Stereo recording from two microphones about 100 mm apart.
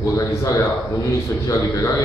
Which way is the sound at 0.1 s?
35° left (ahead or behind).